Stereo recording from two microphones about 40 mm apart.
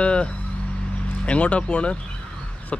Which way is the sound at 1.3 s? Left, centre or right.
Left.